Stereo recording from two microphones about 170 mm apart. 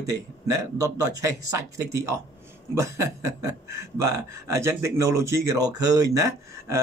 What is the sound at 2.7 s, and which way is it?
Speech, 15° right (ahead or behind).